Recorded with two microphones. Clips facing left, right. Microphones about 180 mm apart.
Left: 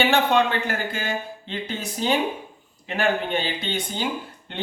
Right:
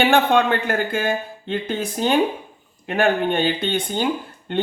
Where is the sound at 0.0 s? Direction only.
50° right (ahead or behind).